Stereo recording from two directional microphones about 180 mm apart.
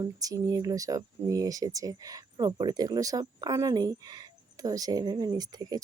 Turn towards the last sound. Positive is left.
turn(degrees=-20)  # may be behind; listen again after turning